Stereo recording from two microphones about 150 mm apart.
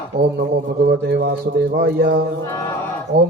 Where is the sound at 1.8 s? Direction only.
90° right.